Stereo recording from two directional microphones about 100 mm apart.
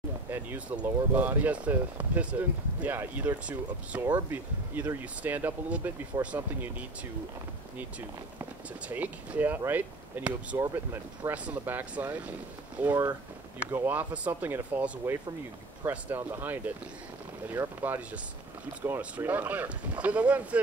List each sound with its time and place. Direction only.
0.3 s speech: 20° right (ahead or behind)
6.1 s speech: 45° right (ahead or behind)
8.8 s speech: 15° right (ahead or behind)